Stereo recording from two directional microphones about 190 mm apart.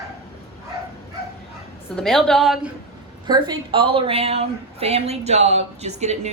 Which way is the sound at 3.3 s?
25° right (ahead or behind).